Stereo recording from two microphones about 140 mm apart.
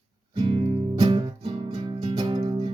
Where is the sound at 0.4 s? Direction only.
40° right (ahead or behind).